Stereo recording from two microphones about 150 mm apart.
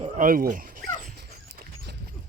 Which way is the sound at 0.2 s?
65° right (ahead or behind).